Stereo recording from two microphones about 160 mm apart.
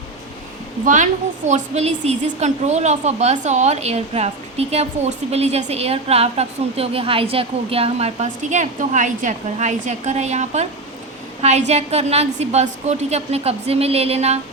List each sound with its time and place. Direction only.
1.5 s a woman's voice: 45° right (ahead or behind)